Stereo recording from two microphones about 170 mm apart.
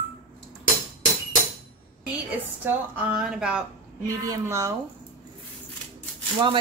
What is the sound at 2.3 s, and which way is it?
A woman's voice, 5° right (ahead or behind).